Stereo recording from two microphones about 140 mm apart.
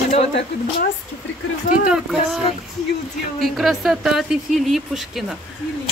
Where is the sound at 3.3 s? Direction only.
Centre (ahead or behind).